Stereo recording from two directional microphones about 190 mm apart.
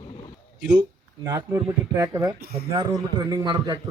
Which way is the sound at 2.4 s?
55° right (ahead or behind).